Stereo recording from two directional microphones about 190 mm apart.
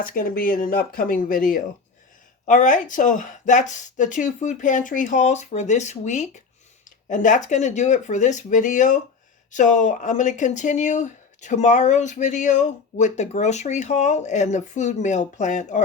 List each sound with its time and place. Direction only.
0.0 s speech: 50° left (ahead or behind)